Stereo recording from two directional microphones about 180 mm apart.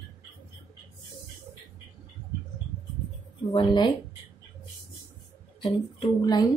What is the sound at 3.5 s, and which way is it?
Speech, 25° left (ahead or behind).